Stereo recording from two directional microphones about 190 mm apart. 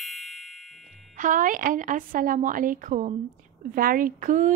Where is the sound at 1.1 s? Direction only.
45° right (ahead or behind).